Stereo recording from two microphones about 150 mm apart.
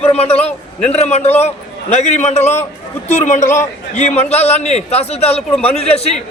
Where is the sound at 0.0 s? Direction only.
45° left (ahead or behind).